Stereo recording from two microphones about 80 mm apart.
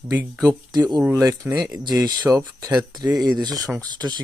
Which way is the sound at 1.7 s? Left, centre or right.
Right.